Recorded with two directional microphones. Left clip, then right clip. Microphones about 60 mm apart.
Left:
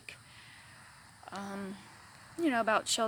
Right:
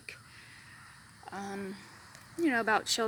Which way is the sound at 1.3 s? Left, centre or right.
Left.